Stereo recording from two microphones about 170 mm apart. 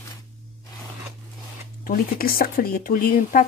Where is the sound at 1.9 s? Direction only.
60° left (ahead or behind).